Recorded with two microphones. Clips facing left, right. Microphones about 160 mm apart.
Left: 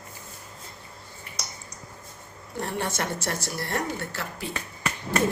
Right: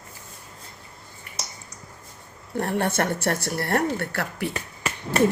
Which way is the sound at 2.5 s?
60° right (ahead or behind).